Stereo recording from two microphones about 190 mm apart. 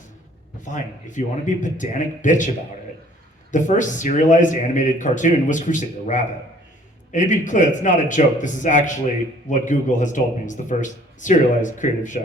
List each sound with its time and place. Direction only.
0.6 s a man's voice: 40° left (ahead or behind)
3.5 s a man's voice: 40° left (ahead or behind)